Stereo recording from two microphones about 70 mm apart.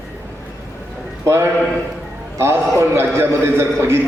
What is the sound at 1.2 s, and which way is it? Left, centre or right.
A man's voice, right.